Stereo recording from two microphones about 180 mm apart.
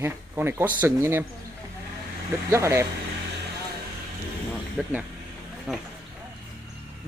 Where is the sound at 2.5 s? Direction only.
15° right (ahead or behind).